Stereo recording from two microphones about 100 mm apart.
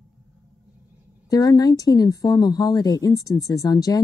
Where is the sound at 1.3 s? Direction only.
35° left (ahead or behind).